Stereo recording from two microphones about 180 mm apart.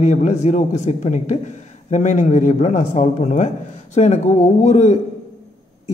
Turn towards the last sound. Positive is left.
turn(degrees=35)  # may be behind; listen again after turning